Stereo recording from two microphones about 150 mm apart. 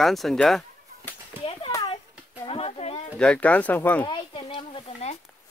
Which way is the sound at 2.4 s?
40° left (ahead or behind).